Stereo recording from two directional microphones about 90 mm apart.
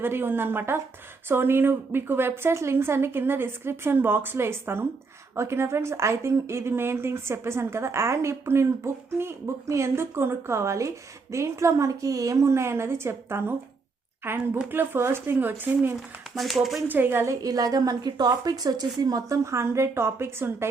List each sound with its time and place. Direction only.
0.0 s a woman's voice: 25° right (ahead or behind)
16.0 s speech: centre (ahead or behind)
16.9 s a woman's voice: 25° right (ahead or behind)
17.2 s a woman's voice: 40° right (ahead or behind)